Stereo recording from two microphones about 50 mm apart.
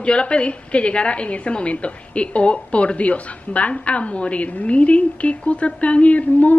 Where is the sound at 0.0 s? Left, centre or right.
Left.